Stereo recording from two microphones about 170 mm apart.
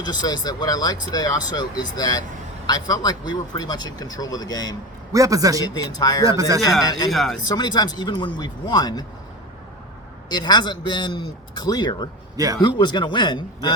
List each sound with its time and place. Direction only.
0.0 s speech: 25° left (ahead or behind)
5.1 s a man's voice: 20° right (ahead or behind)
5.7 s speech: 20° left (ahead or behind)
6.2 s a man's voice: 20° right (ahead or behind)
7.1 s speech: centre (ahead or behind)
7.4 s speech: 25° left (ahead or behind)
10.2 s speech: 25° left (ahead or behind)